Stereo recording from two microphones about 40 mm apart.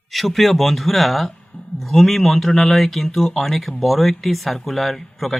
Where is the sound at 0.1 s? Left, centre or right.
Centre.